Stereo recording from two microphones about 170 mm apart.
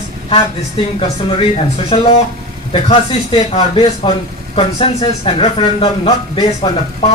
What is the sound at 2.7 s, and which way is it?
Speech, 30° left (ahead or behind).